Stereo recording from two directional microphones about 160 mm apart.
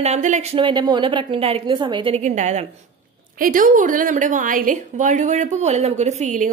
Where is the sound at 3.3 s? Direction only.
60° right (ahead or behind).